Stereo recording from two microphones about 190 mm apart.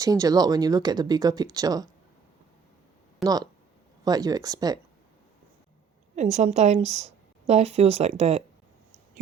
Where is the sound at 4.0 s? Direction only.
20° right (ahead or behind).